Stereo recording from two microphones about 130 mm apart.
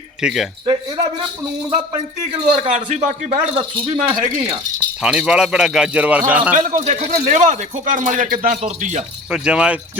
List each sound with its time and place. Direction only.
0.2 s speech: 5° right (ahead or behind)
2.6 s a man's voice: 60° right (ahead or behind)
3.3 s speech: 40° right (ahead or behind)
5.0 s a man's voice: 5° right (ahead or behind)
6.5 s a man's voice: 85° right; by 9.0 s 70° right (ahead or behind)
9.3 s a man's voice: 5° right (ahead or behind)